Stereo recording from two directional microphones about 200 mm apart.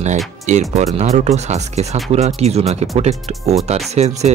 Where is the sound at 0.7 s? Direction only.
35° right (ahead or behind).